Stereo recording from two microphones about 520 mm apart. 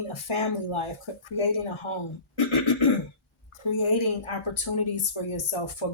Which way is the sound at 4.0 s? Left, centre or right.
Left.